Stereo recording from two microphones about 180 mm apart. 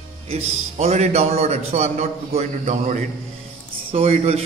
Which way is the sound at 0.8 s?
40° right (ahead or behind).